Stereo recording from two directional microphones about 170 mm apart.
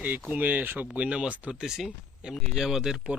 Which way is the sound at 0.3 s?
10° right (ahead or behind).